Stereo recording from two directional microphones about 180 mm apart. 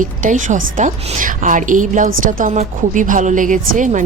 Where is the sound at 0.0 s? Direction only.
45° right (ahead or behind).